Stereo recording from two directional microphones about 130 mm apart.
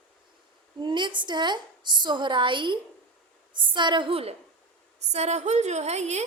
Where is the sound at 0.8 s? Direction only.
35° right (ahead or behind).